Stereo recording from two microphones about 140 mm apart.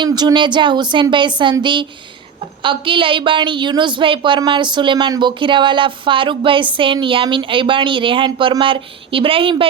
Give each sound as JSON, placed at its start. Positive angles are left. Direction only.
{"t": 0.0, "sound": "a woman's voice", "side_deg": -30}